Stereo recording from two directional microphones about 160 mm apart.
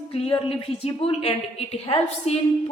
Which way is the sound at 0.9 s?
35° left (ahead or behind).